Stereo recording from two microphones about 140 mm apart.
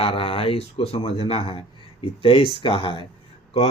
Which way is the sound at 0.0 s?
40° left (ahead or behind).